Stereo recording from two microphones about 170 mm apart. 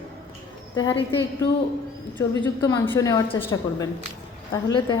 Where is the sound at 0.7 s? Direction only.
30° left (ahead or behind).